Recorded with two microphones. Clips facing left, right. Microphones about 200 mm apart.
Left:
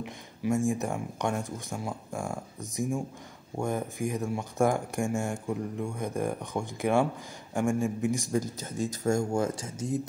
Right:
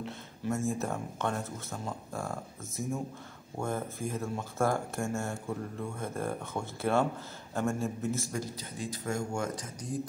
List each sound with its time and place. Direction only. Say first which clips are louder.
0.0 s speech: left 4 dB; 15° left (ahead or behind)
8.5 s speech: left 6 dB; 45° left (ahead or behind); by 10.0 s 25° left (ahead or behind)